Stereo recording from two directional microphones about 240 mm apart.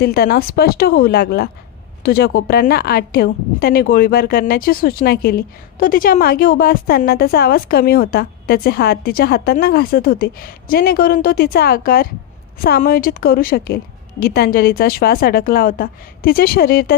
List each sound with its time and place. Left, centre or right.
0.0 s a woman's voice: left